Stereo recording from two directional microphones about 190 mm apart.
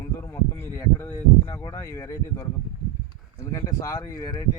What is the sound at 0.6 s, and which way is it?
Speech, 15° left (ahead or behind).